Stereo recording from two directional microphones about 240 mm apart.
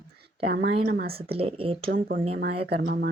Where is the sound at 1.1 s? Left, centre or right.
Right.